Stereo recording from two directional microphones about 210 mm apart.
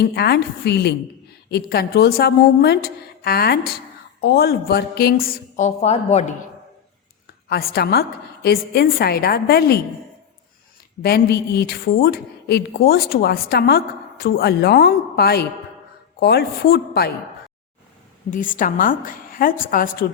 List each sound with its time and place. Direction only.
0.0 s a woman's voice: 50° left (ahead or behind); by 6.3 s 30° left (ahead or behind)
7.5 s a woman's voice: 45° left (ahead or behind)
11.0 s a woman's voice: 50° left (ahead or behind)
18.3 s a woman's voice: 40° left (ahead or behind)